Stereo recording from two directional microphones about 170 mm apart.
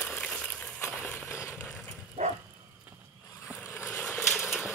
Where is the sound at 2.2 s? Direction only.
40° right (ahead or behind).